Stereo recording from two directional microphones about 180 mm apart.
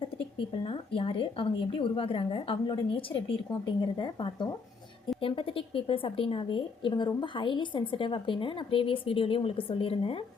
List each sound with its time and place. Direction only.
0.3 s a woman's voice: 30° left (ahead or behind)